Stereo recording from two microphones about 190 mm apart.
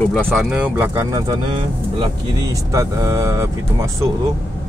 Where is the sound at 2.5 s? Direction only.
15° right (ahead or behind).